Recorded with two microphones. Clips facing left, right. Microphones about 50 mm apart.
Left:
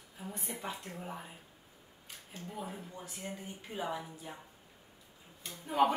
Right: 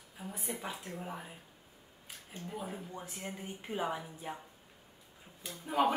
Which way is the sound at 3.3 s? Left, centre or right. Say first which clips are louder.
Right 2 dB; right.